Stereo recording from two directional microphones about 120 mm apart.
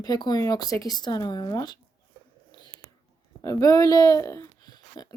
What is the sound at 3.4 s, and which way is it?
Speech, 30° left (ahead or behind).